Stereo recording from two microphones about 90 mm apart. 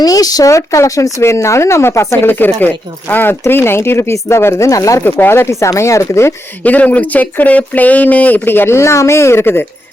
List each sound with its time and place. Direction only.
0.0 s speech: 45° left (ahead or behind)
5.0 s speech: 20° left (ahead or behind)
6.6 s speech: 15° left (ahead or behind)